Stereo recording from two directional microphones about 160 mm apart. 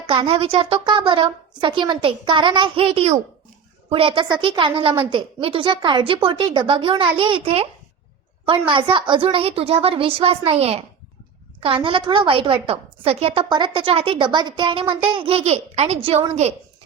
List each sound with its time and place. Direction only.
0.1 s a woman's voice: 35° right (ahead or behind)